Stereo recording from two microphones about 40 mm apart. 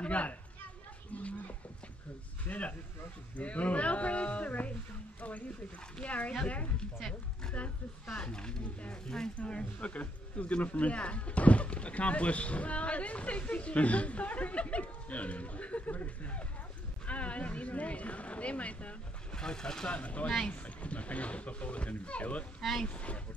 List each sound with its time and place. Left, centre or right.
0.0 s chatter: left
1.1 s speech: left
2.4 s speech: left
6.0 s speech: left
8.2 s speech: left
9.4 s speech: left
17.0 s speech: left
19.3 s speech: centre
19.9 s speech: left
22.6 s speech: centre
22.8 s speech: left